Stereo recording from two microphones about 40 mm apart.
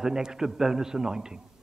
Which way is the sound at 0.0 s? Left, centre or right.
Centre.